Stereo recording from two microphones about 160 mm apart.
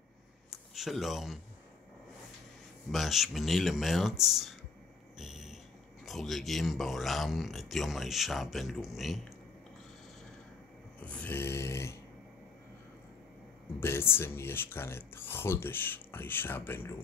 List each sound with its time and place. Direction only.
0.5 s a sound: centre (ahead or behind)
2.9 s a man's voice: centre (ahead or behind)
5.2 s a sound: centre (ahead or behind)
6.0 s a man's voice: centre (ahead or behind)
11.1 s speech: 10° left (ahead or behind)
13.7 s speech: 15° left (ahead or behind)